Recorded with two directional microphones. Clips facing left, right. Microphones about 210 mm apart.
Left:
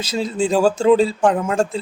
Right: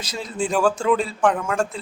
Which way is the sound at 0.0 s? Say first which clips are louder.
Left 6 dB; 25° left (ahead or behind).